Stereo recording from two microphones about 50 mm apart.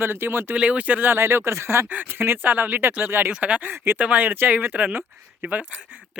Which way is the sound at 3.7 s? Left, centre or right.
Right.